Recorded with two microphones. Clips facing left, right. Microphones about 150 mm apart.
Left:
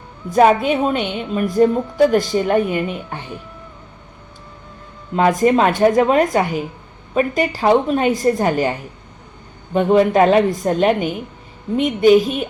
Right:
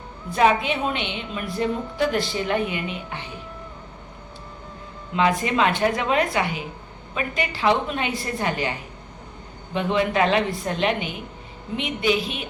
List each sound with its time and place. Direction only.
0.3 s a woman's voice: 45° left (ahead or behind)
5.1 s a woman's voice: 45° left (ahead or behind)